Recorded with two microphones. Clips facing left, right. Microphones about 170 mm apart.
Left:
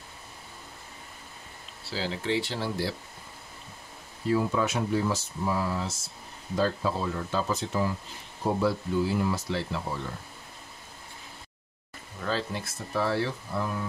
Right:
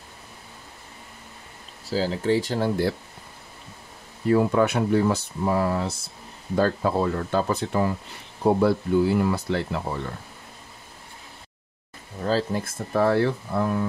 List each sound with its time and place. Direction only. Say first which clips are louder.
1.9 s speech: right 7 dB; 40° right (ahead or behind)
4.3 s speech: right 6 dB; 60° right (ahead or behind)
12.2 s speech: right 7 dB; 40° right (ahead or behind); by 13.7 s 55° right (ahead or behind)